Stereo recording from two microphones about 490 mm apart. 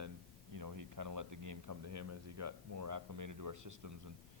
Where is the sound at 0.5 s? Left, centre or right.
Right.